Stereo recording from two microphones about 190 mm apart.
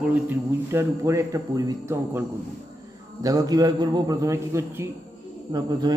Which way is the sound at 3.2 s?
20° right (ahead or behind).